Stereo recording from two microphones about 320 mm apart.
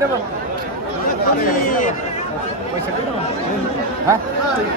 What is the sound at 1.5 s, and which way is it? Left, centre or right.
Speech, left.